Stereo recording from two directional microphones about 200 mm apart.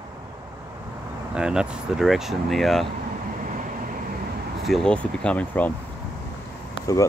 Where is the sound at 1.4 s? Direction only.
5° right (ahead or behind).